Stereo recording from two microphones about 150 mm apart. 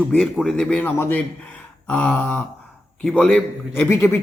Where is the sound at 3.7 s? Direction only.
15° left (ahead or behind).